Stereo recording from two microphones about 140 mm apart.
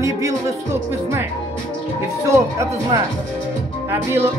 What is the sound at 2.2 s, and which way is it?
Speech, 20° right (ahead or behind).